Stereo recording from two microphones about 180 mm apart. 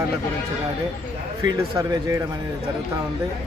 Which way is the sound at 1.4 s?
15° right (ahead or behind).